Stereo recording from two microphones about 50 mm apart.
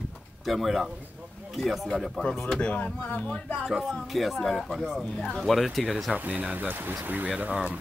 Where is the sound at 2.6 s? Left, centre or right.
Left.